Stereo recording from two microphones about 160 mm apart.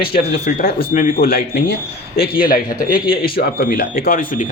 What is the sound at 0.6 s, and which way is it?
Speech, 65° left (ahead or behind).